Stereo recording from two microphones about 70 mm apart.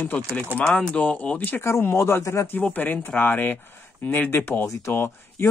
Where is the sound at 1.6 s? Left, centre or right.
Left.